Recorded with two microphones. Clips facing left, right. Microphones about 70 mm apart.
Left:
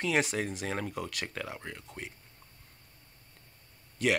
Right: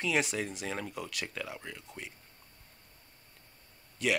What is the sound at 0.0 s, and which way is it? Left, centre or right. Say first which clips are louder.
Speech: left 2 dB; left.